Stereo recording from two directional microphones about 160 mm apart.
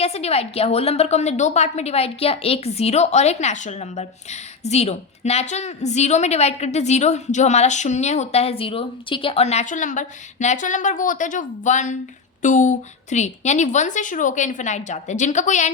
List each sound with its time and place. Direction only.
0.0 s a woman's voice: 40° left (ahead or behind)